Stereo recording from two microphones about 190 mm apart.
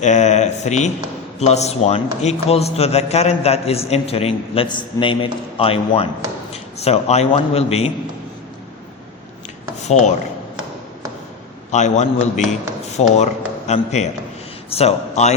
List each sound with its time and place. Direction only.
0.0 s a man's voice: 40° left (ahead or behind)
9.8 s rub: 35° left (ahead or behind)
11.7 s a man's voice: 40° left (ahead or behind)